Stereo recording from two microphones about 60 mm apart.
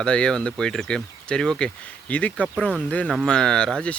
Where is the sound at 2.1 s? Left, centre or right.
Left.